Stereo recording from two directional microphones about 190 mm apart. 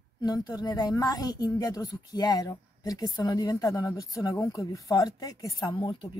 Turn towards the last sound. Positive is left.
turn(degrees=20)  # may be behind; listen again after turning